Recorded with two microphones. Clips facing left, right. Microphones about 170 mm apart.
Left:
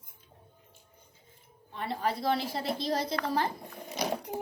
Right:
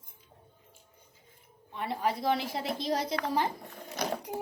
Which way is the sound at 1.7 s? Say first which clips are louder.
Right 1 dB; 10° right (ahead or behind).